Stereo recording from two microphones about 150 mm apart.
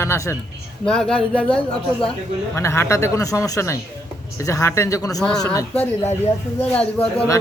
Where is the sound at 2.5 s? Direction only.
15° left (ahead or behind).